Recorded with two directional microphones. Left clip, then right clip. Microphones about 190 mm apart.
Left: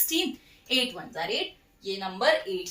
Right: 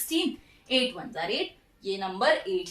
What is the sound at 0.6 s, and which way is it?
A woman's voice, 10° right (ahead or behind).